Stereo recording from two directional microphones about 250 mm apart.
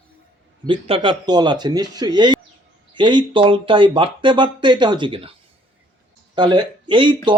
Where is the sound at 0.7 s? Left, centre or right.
Right.